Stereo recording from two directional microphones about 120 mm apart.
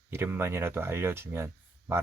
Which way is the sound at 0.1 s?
20° right (ahead or behind).